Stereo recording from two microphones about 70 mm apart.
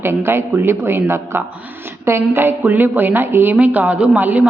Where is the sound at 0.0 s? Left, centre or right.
Right.